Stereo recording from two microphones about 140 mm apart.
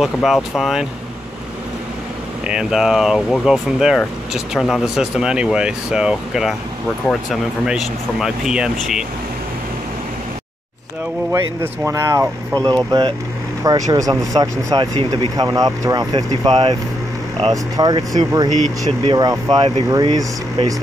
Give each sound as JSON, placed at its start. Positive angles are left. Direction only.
{"t": 0.0, "sound": "speech", "side_deg": 0}
{"t": 2.4, "sound": "speech", "side_deg": -5}
{"t": 11.6, "sound": "speech", "side_deg": -20}
{"t": 18.5, "sound": "speech", "side_deg": -60}
{"t": 19.1, "sound": "speech", "side_deg": -30}